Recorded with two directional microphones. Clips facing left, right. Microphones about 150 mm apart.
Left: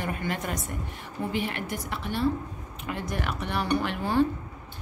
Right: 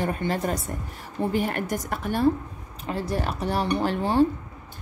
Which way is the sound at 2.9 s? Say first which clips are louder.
Right 4 dB; 30° right (ahead or behind).